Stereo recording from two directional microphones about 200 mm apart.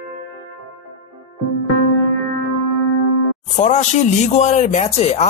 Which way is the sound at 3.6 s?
35° left (ahead or behind).